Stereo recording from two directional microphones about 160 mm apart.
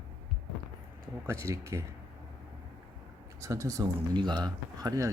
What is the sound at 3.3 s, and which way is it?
Speech, 20° right (ahead or behind).